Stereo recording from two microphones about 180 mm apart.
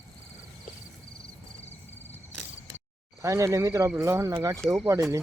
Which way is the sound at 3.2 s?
15° right (ahead or behind).